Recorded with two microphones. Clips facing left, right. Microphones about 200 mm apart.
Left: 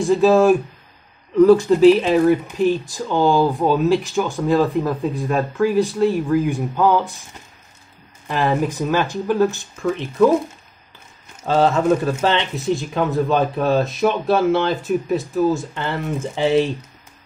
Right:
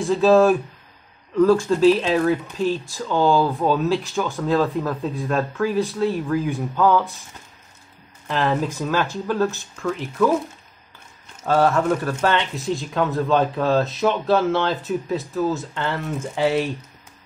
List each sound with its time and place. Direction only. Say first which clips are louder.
0.0 s speech: left 1 dB; 15° left (ahead or behind)
8.3 s speech: left 2 dB; 10° left (ahead or behind)
11.4 s speech: left 2 dB; 25° left (ahead or behind)